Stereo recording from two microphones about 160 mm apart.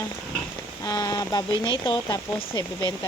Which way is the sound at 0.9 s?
25° left (ahead or behind).